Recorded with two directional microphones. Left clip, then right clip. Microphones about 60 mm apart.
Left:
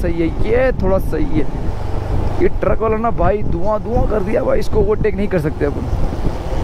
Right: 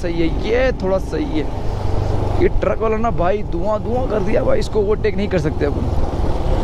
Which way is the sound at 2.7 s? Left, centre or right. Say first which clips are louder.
Left 2 dB; left.